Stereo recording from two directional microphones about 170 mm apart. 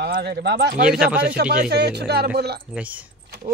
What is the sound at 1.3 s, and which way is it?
Speech, 65° right (ahead or behind).